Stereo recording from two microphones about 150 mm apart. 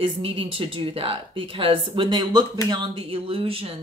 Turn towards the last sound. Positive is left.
turn(degrees=-35)  # may be behind; listen again after turning